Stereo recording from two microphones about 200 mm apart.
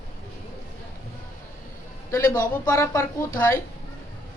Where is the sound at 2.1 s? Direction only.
15° left (ahead or behind).